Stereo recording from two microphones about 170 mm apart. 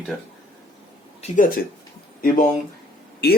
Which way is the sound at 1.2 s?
50° left (ahead or behind).